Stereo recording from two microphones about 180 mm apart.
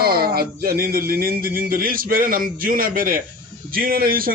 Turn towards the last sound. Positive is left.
turn(degrees=-55)  # may be behind; listen again after turning